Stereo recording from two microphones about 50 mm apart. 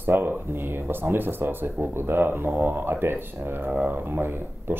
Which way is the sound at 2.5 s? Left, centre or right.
Right.